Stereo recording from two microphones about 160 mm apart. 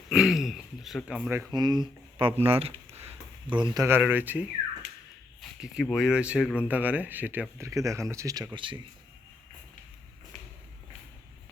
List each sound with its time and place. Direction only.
0.1 s speech: 5° right (ahead or behind)
1.5 s speech: 25° right (ahead or behind)
2.1 s a sound: 35° right (ahead or behind)
3.8 s speech: 15° right (ahead or behind); by 8.8 s 30° right (ahead or behind)